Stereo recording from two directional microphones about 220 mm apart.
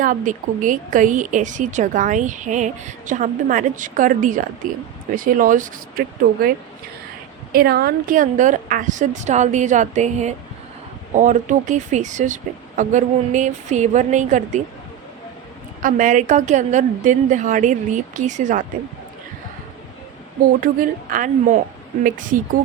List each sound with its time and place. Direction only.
0.0 s speech: 35° right (ahead or behind)
7.5 s speech: 45° right (ahead or behind)
15.8 s speech: 35° right (ahead or behind)
20.6 s speech: 40° right (ahead or behind)